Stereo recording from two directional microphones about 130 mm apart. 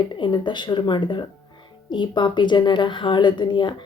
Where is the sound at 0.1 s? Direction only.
35° left (ahead or behind).